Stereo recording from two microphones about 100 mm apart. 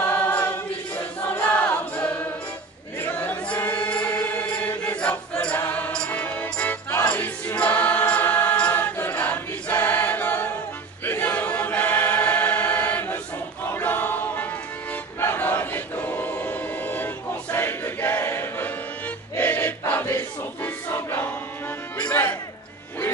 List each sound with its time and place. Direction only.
0.1 s choir: 20° left (ahead or behind)
3.1 s chant: 20° left (ahead or behind)
3.5 s choir: 20° left (ahead or behind)
5.0 s music: 10° left (ahead or behind)
11.1 s choir: 20° left (ahead or behind)
19.3 s a sound: 20° left (ahead or behind)
20.6 s music: 25° left (ahead or behind)